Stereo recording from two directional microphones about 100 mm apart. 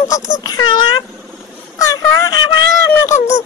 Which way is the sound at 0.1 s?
40° left (ahead or behind).